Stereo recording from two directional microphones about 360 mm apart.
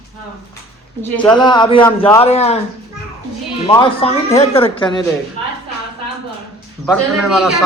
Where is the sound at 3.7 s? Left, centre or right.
Centre.